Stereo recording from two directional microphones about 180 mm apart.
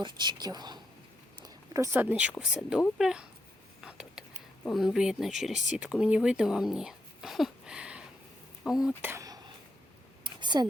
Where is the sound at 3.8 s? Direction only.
5° right (ahead or behind).